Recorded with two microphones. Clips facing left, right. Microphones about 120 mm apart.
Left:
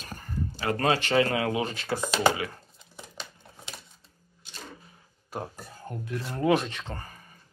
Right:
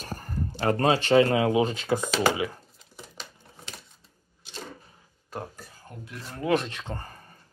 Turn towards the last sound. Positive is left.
turn(degrees=0)  # may be behind; listen again after turning